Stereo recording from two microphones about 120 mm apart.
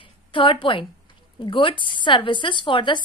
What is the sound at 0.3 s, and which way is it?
A woman's voice, 45° left (ahead or behind).